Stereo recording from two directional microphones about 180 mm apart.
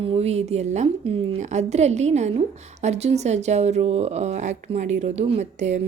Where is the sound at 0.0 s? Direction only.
35° right (ahead or behind).